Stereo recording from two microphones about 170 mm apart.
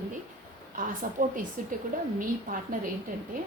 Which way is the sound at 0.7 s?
50° right (ahead or behind).